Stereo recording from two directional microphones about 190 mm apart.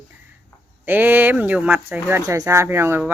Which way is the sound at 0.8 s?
10° right (ahead or behind).